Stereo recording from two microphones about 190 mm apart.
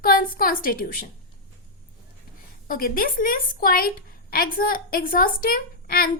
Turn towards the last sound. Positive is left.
turn(degrees=50)  # may be behind; listen again after turning